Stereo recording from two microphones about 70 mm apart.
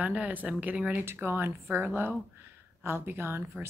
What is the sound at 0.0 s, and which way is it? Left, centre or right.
Speech, right.